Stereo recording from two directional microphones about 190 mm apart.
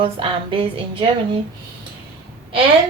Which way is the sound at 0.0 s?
30° right (ahead or behind).